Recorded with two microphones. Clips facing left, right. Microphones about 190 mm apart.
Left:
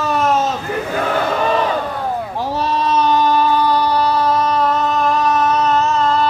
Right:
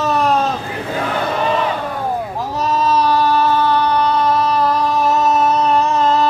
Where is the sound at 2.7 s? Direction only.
25° left (ahead or behind).